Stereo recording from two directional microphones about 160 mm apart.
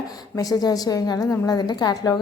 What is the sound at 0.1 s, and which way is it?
A woman's voice, 20° left (ahead or behind).